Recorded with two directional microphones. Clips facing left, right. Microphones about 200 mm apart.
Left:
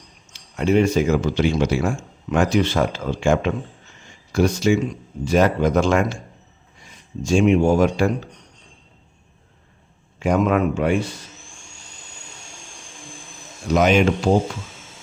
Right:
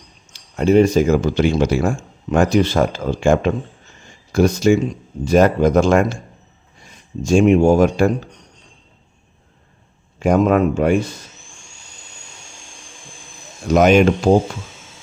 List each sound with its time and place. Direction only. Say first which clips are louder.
0.3 s speech: right 5 dB; 40° right (ahead or behind)
4.0 s a sound: right 4 dB; 45° right (ahead or behind)
4.8 s speech: right 2 dB; 40° right (ahead or behind)
7.2 s speech: right 4 dB; 45° right (ahead or behind)
10.2 s speech: right 4 dB; 40° right (ahead or behind)
13.7 s speech: right 4 dB; 50° right (ahead or behind)